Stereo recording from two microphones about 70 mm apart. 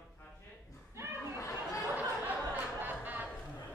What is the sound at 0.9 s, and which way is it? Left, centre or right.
Chuckle, right.